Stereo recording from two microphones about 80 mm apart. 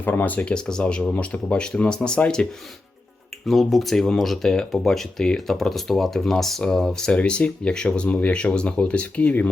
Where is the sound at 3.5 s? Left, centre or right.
Centre.